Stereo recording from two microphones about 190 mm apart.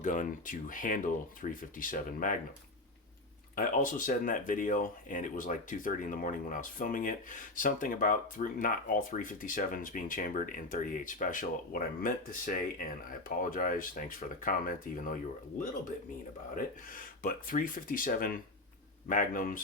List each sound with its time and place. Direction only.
0.0 s speech: 40° left (ahead or behind)
3.5 s speech: 45° left (ahead or behind)
16.6 s speech: 45° left (ahead or behind)